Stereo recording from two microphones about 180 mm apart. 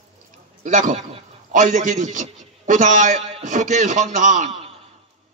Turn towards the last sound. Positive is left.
turn(degrees=-45)  # may be behind; listen again after turning